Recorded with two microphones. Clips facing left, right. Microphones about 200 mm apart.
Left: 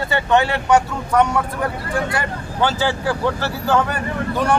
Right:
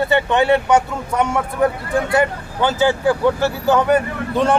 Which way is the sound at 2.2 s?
15° right (ahead or behind).